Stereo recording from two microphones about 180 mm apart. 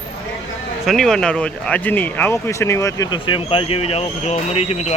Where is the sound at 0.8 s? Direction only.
Centre (ahead or behind).